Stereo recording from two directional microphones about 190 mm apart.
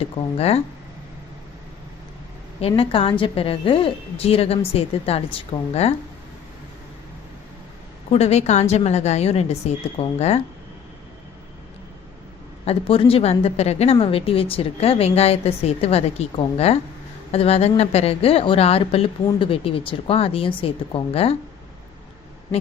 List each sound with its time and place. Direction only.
0.0 s a woman's voice: 35° left (ahead or behind)
2.6 s a woman's voice: 30° left (ahead or behind)
8.1 s a woman's voice: 35° left (ahead or behind)
12.6 s a woman's voice: 30° left (ahead or behind)